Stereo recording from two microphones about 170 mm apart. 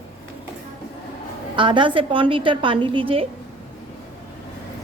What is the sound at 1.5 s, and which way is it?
A woman's voice, 30° right (ahead or behind).